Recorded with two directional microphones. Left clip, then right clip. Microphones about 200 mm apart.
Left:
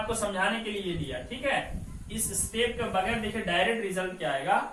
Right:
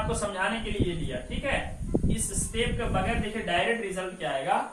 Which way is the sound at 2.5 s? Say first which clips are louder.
Left 1 dB; 5° left (ahead or behind).